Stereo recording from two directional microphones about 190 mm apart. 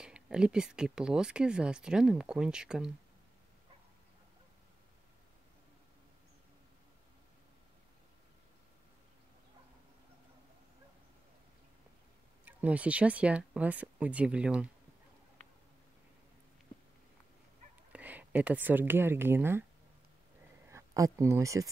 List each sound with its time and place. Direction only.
0.0 s speech: 5° right (ahead or behind)
12.4 s speech: 5° right (ahead or behind)
17.9 s speech: 10° right (ahead or behind)
20.7 s speech: 15° right (ahead or behind)